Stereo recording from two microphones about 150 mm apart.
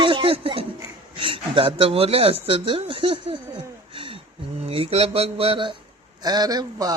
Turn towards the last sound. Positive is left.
turn(degrees=-25)  # may be behind; listen again after turning